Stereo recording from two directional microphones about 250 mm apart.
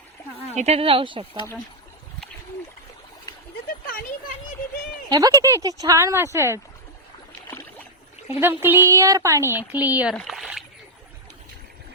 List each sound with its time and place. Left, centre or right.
0.5 s speech: right
5.0 s speech: centre
7.5 s rowboat: centre
8.4 s speech: centre
10.2 s splash: centre